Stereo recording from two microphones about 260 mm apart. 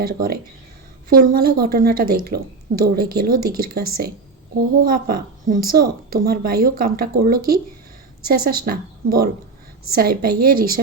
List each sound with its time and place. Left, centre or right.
0.0 s a woman's voice: right